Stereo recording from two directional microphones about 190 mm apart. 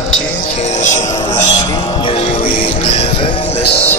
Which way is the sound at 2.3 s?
45° left (ahead or behind).